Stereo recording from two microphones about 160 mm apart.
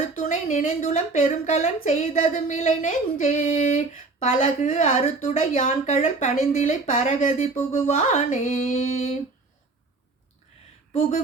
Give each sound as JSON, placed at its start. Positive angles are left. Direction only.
{"t": 0.2, "sound": "speech", "side_deg": 50}